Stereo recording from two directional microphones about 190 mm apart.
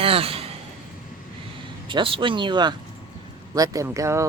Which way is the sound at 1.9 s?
25° right (ahead or behind).